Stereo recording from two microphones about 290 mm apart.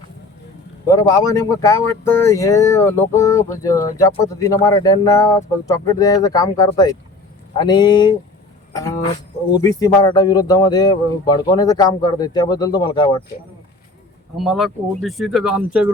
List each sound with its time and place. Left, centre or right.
0.9 s speech: centre
9.5 s speech: centre
14.3 s speech: centre